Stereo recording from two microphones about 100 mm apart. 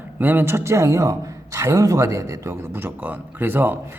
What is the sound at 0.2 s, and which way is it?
Speech, 20° right (ahead or behind).